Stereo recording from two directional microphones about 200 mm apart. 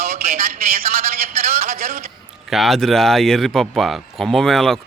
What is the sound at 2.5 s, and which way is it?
Speech, centre (ahead or behind).